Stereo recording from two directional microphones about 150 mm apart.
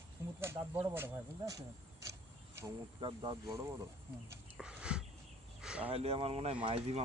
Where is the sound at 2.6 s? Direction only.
30° right (ahead or behind).